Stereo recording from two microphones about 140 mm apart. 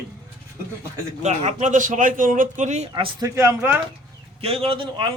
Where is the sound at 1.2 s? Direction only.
55° right (ahead or behind).